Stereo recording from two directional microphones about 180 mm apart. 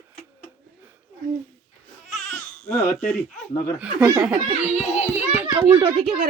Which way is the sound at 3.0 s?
5° left (ahead or behind).